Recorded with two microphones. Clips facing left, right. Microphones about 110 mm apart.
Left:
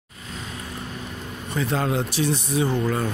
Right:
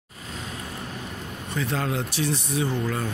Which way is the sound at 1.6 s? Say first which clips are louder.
Left 4 dB; 25° left (ahead or behind).